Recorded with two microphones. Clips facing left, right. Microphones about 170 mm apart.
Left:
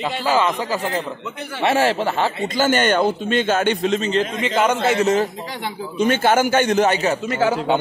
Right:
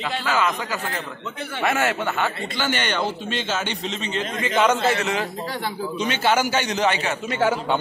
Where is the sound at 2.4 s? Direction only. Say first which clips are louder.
Left 8 dB; 45° left (ahead or behind).